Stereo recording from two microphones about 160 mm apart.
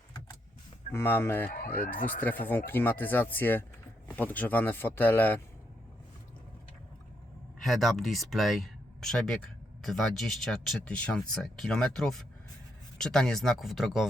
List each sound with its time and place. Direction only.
0.9 s speech: 15° left (ahead or behind)
1.5 s speech: 70° left (ahead or behind)
2.2 s speech: 10° left (ahead or behind)
7.6 s speech: centre (ahead or behind)